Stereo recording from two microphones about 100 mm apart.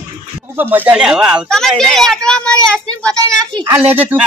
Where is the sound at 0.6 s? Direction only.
20° right (ahead or behind).